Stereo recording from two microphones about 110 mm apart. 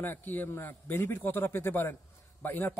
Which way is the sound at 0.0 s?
20° left (ahead or behind).